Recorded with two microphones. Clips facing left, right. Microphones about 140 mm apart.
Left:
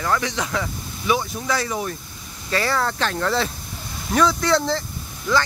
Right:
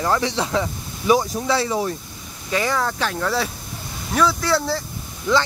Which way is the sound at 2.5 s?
15° right (ahead or behind).